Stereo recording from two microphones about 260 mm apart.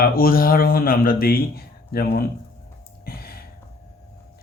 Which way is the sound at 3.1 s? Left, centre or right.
Left.